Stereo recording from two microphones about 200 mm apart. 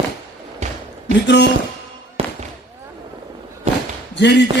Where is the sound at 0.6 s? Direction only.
35° right (ahead or behind).